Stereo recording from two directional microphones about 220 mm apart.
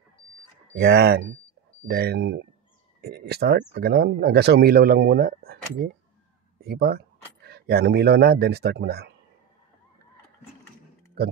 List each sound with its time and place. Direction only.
0.7 s speech: 45° right (ahead or behind)